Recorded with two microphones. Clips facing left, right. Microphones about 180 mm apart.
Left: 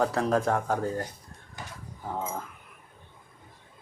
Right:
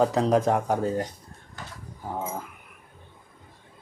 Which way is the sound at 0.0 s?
20° right (ahead or behind).